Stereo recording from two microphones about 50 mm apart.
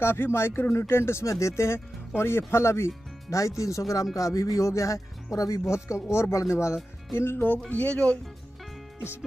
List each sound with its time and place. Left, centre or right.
0.0 s speech: left
3.3 s speech: left
5.7 s speech: left
6.3 s speech: left
7.2 s speech: left
7.7 s speech: left